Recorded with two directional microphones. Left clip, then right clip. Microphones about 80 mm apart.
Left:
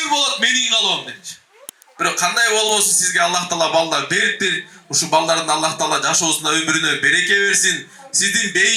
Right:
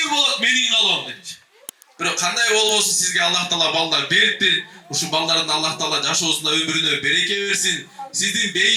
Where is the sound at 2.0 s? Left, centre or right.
Left.